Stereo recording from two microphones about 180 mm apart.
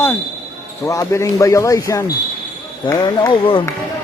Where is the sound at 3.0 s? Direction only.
25° left (ahead or behind).